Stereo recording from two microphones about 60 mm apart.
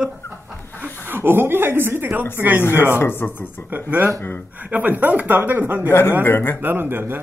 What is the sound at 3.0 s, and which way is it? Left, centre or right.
Speech, left.